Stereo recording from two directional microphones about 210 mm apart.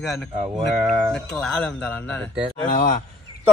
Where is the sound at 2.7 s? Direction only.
40° left (ahead or behind).